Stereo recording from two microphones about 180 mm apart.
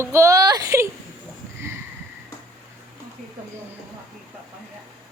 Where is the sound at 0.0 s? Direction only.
15° right (ahead or behind).